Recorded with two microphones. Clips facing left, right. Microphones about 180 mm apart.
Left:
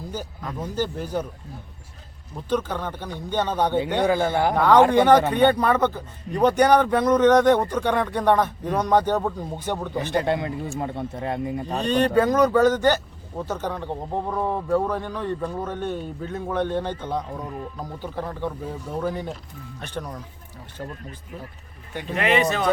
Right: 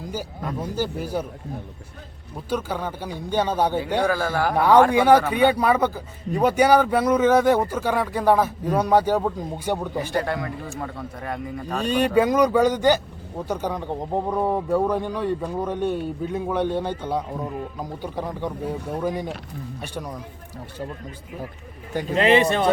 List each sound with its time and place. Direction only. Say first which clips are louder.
0.1 s a man's voice: right 5 dB; 10° right (ahead or behind)
2.5 s a man's voice: left 1 dB; 10° right (ahead or behind)
4.0 s a man's voice: left 3 dB; 25° left (ahead or behind)
4.5 s a man's voice: even; 10° right (ahead or behind)
10.2 s a man's voice: left 3 dB; 25° left (ahead or behind)
11.8 s a man's voice: even; 10° right (ahead or behind)
22.1 s speech: right 3 dB; 30° right (ahead or behind)